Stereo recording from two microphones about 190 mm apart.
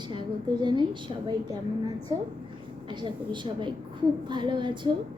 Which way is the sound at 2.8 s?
25° right (ahead or behind).